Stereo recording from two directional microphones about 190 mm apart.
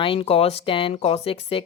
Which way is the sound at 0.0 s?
30° left (ahead or behind).